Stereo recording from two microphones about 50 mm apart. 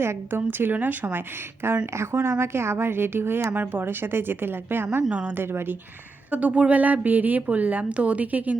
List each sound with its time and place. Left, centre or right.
0.0 s speech: right
1.6 s speech: right
3.5 s speech: right
5.0 s a woman's voice: right
5.4 s speech: right
6.3 s a woman's voice: right